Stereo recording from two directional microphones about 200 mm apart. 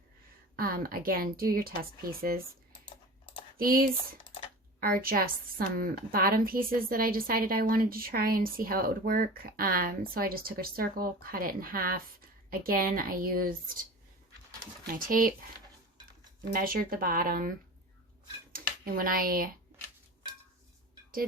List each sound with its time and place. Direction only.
0.5 s a woman's voice: 45° right (ahead or behind)
3.6 s a woman's voice: 45° right (ahead or behind)
14.9 s a woman's voice: 45° right (ahead or behind)
16.5 s a woman's voice: 45° right (ahead or behind)
18.5 s speech: 45° right (ahead or behind)